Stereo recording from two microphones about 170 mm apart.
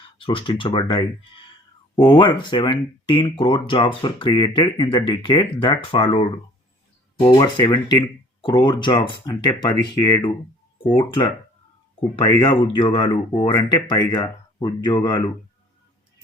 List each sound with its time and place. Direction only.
0.0 s speech: 30° left (ahead or behind)